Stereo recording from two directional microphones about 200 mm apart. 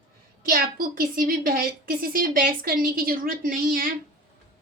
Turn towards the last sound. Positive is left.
turn(degrees=-45)  # may be behind; listen again after turning